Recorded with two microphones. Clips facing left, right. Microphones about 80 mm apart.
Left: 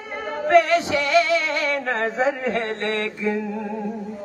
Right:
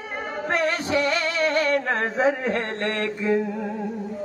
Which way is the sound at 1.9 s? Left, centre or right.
Right.